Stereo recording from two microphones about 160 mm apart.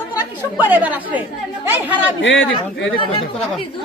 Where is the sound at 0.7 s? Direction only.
10° right (ahead or behind).